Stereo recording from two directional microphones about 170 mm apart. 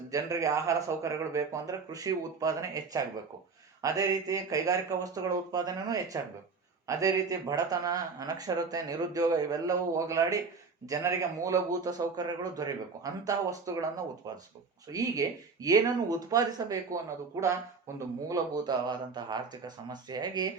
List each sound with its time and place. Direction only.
0.1 s speech: 20° right (ahead or behind)